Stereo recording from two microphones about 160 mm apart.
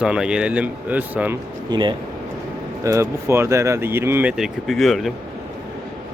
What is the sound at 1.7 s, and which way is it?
Speech, 30° right (ahead or behind).